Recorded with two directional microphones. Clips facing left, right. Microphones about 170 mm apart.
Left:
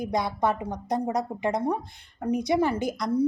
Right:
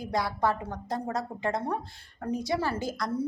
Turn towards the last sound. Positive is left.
turn(degrees=20)  # may be behind; listen again after turning